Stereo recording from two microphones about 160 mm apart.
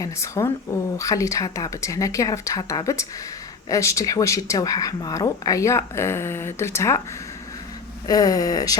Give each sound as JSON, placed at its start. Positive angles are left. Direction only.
{"t": 0.0, "sound": "speech", "side_deg": 20}
{"t": 8.0, "sound": "speech", "side_deg": 20}